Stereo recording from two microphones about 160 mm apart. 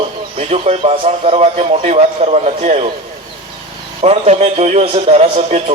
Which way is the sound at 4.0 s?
40° right (ahead or behind).